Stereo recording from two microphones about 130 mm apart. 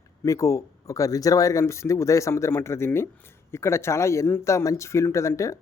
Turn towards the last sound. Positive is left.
turn(degrees=25)  # may be behind; listen again after turning